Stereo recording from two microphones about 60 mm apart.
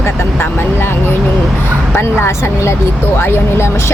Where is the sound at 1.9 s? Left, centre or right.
Left.